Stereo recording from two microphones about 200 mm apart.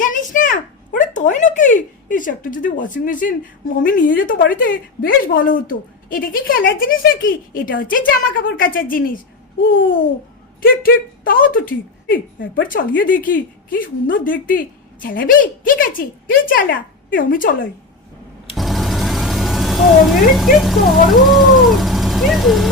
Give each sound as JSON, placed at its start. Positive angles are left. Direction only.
{"t": 0.0, "sound": "a child's voice", "side_deg": 40}
{"t": 10.6, "sound": "a woman's voice", "side_deg": 45}
{"t": 18.5, "sound": "speech", "side_deg": 0}